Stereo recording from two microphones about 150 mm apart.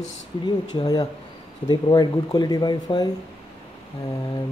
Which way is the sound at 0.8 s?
25° left (ahead or behind).